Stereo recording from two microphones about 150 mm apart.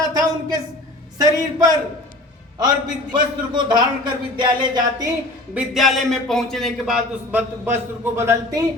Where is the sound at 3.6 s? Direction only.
30° right (ahead or behind).